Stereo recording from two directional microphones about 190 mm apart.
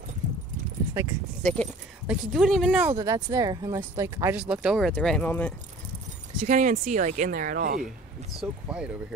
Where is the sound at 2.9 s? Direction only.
20° right (ahead or behind); by 5.5 s 5° left (ahead or behind).